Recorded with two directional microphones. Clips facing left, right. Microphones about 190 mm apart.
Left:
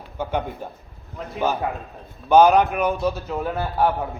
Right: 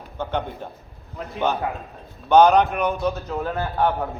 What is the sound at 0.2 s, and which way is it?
A man's voice, 10° left (ahead or behind).